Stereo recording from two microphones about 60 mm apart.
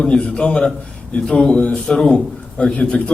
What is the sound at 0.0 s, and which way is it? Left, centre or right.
A man's voice, centre.